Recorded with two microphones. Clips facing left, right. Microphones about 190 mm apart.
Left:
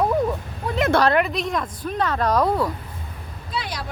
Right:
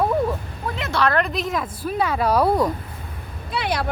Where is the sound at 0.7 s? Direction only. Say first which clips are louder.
Left 6 dB; 45° left (ahead or behind).